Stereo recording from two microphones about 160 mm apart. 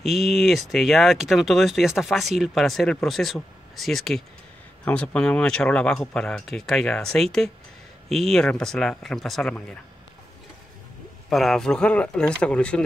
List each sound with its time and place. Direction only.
0.0 s speech: centre (ahead or behind)
11.2 s speech: centre (ahead or behind)